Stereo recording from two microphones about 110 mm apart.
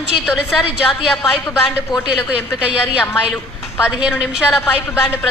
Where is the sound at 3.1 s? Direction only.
20° left (ahead or behind).